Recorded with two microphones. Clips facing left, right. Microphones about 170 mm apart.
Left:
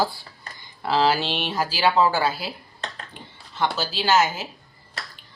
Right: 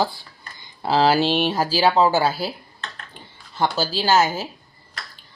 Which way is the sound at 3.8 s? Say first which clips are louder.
Right 2 dB; 35° right (ahead or behind).